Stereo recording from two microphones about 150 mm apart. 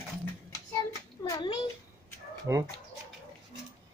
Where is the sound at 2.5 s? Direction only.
20° right (ahead or behind).